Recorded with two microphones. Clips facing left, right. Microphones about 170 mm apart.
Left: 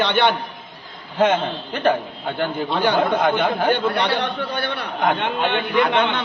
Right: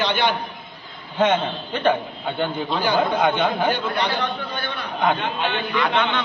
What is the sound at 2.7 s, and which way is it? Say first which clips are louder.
A man's voice: left 3 dB; 60° left (ahead or behind).